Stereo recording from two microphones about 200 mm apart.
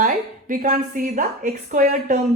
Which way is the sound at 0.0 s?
40° right (ahead or behind).